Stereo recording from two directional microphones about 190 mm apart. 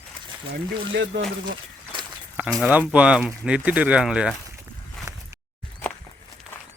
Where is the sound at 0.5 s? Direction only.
65° right (ahead or behind).